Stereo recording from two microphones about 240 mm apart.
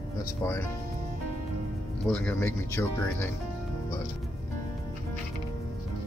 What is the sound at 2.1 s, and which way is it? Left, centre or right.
Speech, centre.